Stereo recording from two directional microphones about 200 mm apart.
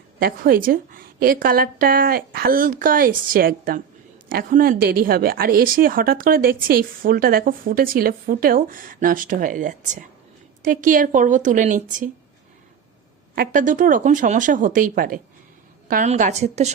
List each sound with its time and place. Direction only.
0.2 s a woman's voice: 50° right (ahead or behind)
13.3 s speech: 45° right (ahead or behind)